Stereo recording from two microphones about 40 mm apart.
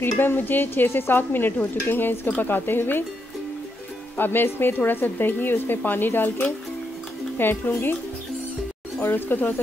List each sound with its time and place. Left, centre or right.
0.0 s speech: left
4.2 s speech: left
9.0 s speech: left